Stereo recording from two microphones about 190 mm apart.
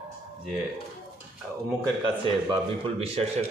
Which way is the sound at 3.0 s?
30° right (ahead or behind).